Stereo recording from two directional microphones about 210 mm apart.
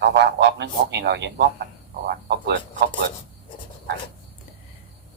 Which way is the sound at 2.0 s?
50° right (ahead or behind).